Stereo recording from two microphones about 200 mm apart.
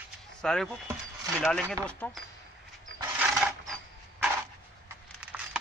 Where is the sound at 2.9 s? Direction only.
70° right (ahead or behind).